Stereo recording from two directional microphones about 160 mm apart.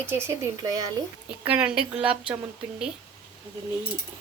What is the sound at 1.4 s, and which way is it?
Speech, 5° right (ahead or behind).